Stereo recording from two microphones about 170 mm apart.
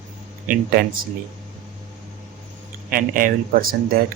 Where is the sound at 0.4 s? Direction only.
55° right (ahead or behind).